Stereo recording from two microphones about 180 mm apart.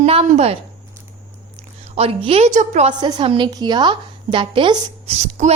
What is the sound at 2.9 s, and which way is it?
A woman's voice, 25° right (ahead or behind).